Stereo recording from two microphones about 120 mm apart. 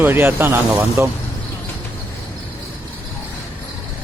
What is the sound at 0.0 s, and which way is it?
Speech, 20° right (ahead or behind).